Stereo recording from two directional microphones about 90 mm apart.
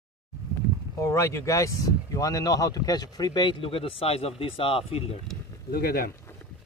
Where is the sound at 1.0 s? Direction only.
35° left (ahead or behind); by 5.1 s 90° left.